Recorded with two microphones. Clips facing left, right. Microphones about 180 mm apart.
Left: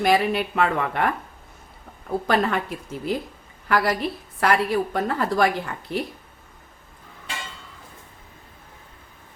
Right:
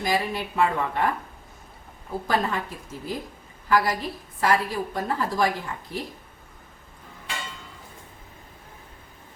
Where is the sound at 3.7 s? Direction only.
70° left (ahead or behind).